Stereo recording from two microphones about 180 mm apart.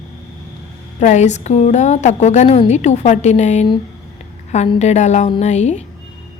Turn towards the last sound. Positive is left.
turn(degrees=40)  # may be behind; listen again after turning